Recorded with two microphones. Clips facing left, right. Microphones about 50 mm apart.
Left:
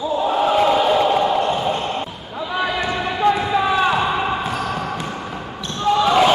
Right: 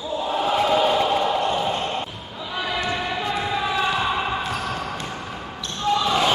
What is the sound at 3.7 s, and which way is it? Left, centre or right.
Basketball bounce, left.